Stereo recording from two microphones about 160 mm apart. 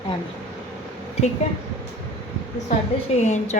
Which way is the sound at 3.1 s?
45° left (ahead or behind).